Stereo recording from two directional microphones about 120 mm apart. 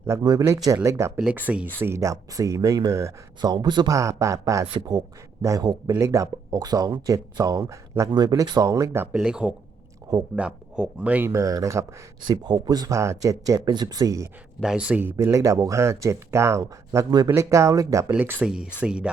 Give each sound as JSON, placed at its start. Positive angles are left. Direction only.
{"t": 0.2, "sound": "a man's voice", "side_deg": -30}
{"t": 1.1, "sound": "speech", "side_deg": -15}
{"t": 1.8, "sound": "a man's voice", "side_deg": -25}
{"t": 3.5, "sound": "speech", "side_deg": -40}
{"t": 3.9, "sound": "a man's voice", "side_deg": -25}
{"t": 9.1, "sound": "speech", "side_deg": -5}
{"t": 11.3, "sound": "a man's voice", "side_deg": -30}
{"t": 14.6, "sound": "speech", "side_deg": -5}
{"t": 15.1, "sound": "a man's voice", "side_deg": -30}
{"t": 18.1, "sound": "speech", "side_deg": -15}